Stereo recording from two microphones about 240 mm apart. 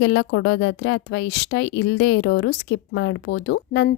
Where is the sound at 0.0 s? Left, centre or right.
Left.